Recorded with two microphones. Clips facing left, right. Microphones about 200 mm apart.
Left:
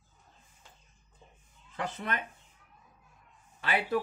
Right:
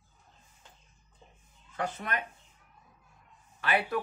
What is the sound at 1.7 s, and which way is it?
Speech, 25° left (ahead or behind).